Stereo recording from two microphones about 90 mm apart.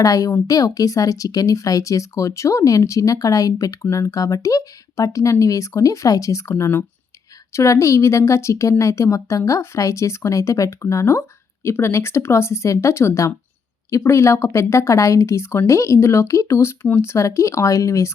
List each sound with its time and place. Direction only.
0.0 s speech: 40° left (ahead or behind)